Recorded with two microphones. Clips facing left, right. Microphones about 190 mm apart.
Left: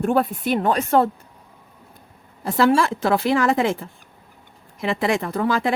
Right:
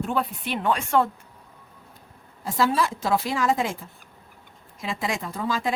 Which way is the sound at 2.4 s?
65° left (ahead or behind).